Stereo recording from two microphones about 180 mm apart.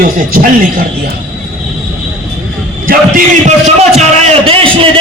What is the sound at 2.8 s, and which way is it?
Speech, 50° right (ahead or behind).